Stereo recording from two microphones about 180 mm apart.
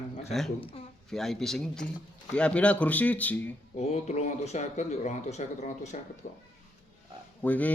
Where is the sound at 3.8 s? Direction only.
35° left (ahead or behind).